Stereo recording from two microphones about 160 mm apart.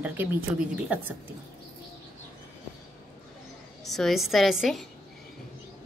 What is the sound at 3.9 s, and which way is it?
A woman's voice, centre (ahead or behind).